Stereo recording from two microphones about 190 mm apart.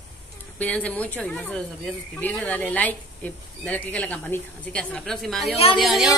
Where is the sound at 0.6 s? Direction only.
5° left (ahead or behind).